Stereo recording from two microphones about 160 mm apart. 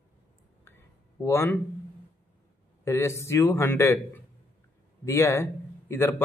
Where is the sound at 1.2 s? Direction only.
15° left (ahead or behind).